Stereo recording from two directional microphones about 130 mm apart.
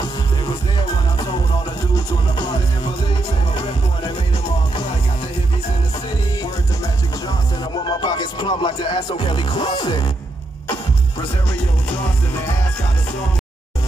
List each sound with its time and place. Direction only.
7.2 s speech: 35° left (ahead or behind)